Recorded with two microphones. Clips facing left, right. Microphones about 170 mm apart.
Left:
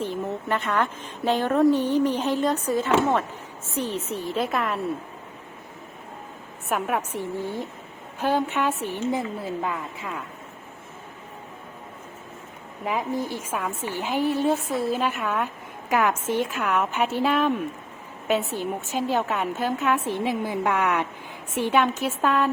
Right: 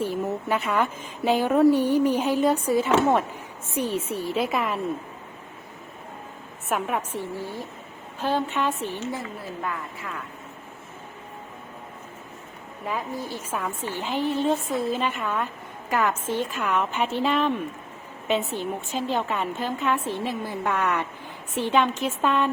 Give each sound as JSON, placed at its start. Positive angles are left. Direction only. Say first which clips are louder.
{"t": 0.0, "sound": "a woman's voice", "louder": "right 2 dB", "side_deg": -10}
{"t": 6.7, "sound": "a woman's voice", "louder": "left 1 dB", "side_deg": 0}
{"t": 7.1, "sound": "a woman's voice", "louder": "left 2 dB", "side_deg": 15}
{"t": 12.8, "sound": "a woman's voice", "louder": "left 4 dB", "side_deg": 15}